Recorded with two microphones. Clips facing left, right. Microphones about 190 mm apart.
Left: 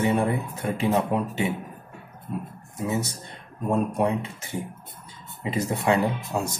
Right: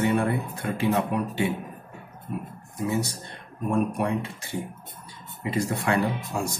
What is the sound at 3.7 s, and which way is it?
Speech, 20° left (ahead or behind).